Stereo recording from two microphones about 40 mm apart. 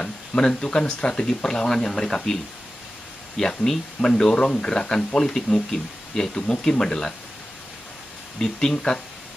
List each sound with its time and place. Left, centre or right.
0.0 s speech: left
3.3 s speech: centre
8.4 s speech: centre